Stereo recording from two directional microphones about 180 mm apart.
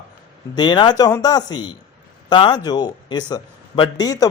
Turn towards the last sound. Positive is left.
turn(degrees=20)  # may be behind; listen again after turning